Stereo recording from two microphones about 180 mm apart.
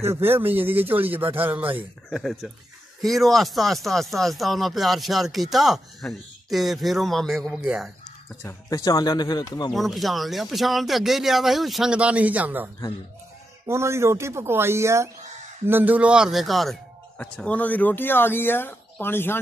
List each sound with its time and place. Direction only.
0.0 s speech: 15° right (ahead or behind)
8.4 s speech: 15° left (ahead or behind)
9.7 s speech: centre (ahead or behind)